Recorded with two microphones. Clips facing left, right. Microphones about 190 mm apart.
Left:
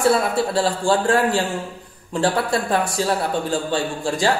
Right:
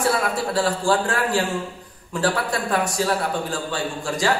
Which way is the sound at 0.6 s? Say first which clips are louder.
Even; 25° left (ahead or behind).